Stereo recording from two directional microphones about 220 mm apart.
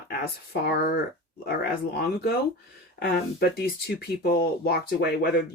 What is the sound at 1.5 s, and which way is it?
Speech, 45° left (ahead or behind).